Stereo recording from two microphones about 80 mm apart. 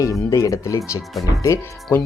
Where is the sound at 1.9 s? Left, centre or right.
Left.